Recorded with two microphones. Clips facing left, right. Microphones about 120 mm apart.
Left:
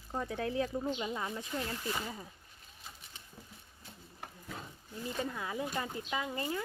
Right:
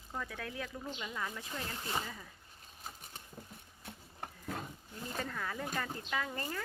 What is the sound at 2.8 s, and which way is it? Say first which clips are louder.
Patter: right 4 dB; 45° right (ahead or behind).